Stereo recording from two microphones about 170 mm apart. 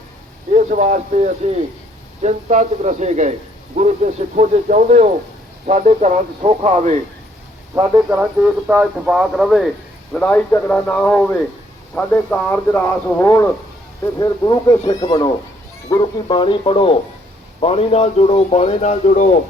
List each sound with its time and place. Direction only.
0.5 s speech: 45° right (ahead or behind)
7.9 s speech: 15° right (ahead or behind)
10.2 s speech: 10° left (ahead or behind); by 19.4 s 45° left (ahead or behind)